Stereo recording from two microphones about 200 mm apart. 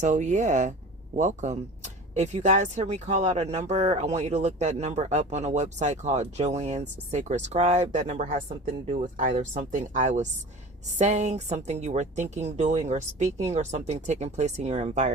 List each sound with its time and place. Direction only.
0.0 s speech: 35° right (ahead or behind)